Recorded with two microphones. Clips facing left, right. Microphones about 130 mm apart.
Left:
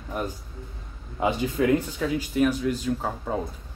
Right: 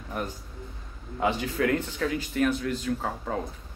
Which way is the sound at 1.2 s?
20° left (ahead or behind).